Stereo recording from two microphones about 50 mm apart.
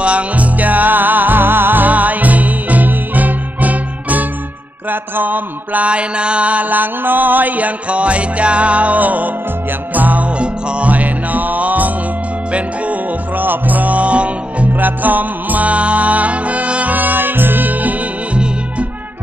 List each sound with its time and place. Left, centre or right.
0.0 s music: right
5.1 s mantra: right
9.9 s music: right
14.7 s music: right
16.9 s music: right